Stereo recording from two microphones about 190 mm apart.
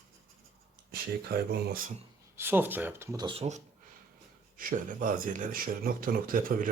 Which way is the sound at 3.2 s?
30° right (ahead or behind).